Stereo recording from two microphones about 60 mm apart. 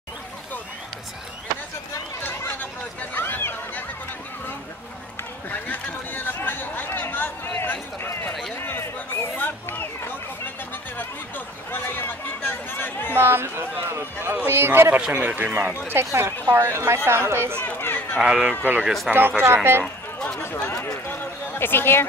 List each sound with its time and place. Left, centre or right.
2.2 s a sound: left
5.5 s chatter: left
8.5 s a sound: left
11.8 s chatter: left
13.2 s a sound: right
14.5 s a woman's voice: right
15.0 s speech: centre
15.9 s a woman's voice: right
17.7 s run: left
18.2 s a man's voice: centre
19.0 s speech: right
20.6 s run: left
21.1 s a sound: left